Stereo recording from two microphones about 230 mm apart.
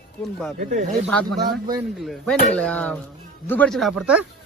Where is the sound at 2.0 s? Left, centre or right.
Centre.